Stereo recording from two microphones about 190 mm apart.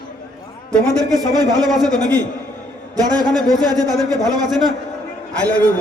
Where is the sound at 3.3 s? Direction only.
Centre (ahead or behind).